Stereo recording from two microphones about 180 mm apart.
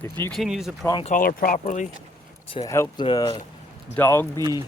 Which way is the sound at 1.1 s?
50° left (ahead or behind).